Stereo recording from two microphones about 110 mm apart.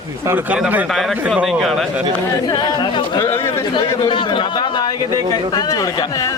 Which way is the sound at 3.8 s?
30° left (ahead or behind).